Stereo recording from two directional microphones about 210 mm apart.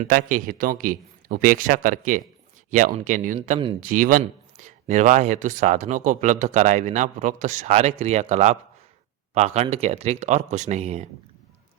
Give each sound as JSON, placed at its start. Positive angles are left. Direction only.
{"t": 0.0, "sound": "speech", "side_deg": -40}